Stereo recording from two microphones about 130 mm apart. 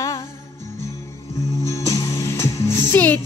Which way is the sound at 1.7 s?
25° left (ahead or behind).